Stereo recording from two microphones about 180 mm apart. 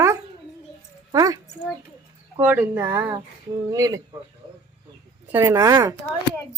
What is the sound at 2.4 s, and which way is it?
Speech, 10° right (ahead or behind).